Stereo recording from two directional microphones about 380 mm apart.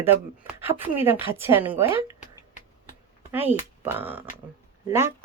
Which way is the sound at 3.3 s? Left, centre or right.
Centre.